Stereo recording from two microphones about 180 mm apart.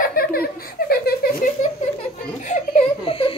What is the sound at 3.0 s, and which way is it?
Speech, 30° left (ahead or behind).